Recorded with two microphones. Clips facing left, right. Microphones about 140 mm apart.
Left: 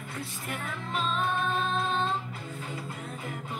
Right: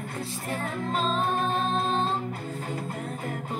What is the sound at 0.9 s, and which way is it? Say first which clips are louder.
Music: right 2 dB; 35° right (ahead or behind).